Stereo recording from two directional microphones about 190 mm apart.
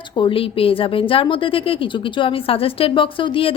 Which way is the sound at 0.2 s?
30° left (ahead or behind).